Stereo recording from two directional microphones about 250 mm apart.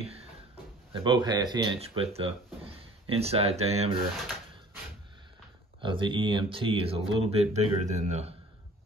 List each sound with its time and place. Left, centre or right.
0.9 s speech: centre
5.8 s speech: centre